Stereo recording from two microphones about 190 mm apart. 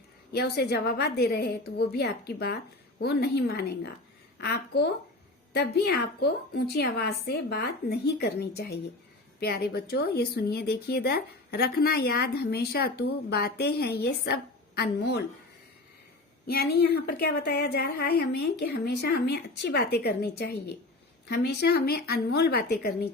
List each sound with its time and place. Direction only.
0.3 s speech: 55° left (ahead or behind)
16.5 s speech: 55° left (ahead or behind)